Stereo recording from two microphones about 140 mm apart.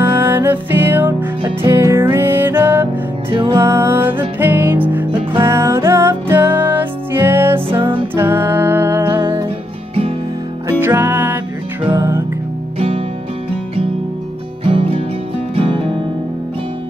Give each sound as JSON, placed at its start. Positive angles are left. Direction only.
{"t": 0.0, "sound": "music", "side_deg": -15}
{"t": 10.8, "sound": "music", "side_deg": -15}
{"t": 12.7, "sound": "music", "side_deg": -45}
{"t": 14.7, "sound": "music", "side_deg": -40}